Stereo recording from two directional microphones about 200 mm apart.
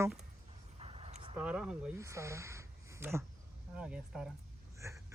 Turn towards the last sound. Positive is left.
turn(degrees=-15)  # may be behind; listen again after turning